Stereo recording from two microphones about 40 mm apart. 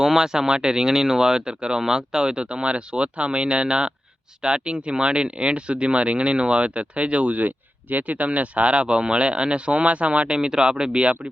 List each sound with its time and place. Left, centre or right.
0.0 s speech: centre